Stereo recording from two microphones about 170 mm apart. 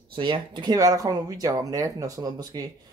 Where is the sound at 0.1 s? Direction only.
30° right (ahead or behind).